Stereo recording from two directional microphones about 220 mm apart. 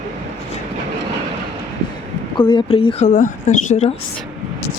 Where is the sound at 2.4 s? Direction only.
20° left (ahead or behind).